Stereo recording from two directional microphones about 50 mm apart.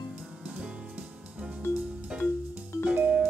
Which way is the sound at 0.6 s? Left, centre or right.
Centre.